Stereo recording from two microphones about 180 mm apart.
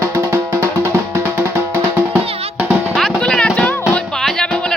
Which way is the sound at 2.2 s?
35° right (ahead or behind).